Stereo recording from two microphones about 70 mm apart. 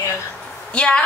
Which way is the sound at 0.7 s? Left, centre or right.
Centre.